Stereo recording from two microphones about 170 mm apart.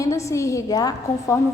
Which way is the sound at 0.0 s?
20° left (ahead or behind).